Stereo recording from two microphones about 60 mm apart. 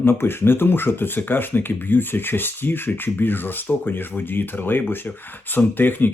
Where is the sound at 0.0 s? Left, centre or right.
Left.